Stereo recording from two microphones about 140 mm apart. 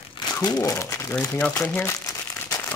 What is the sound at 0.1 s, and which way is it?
Speech, 25° left (ahead or behind).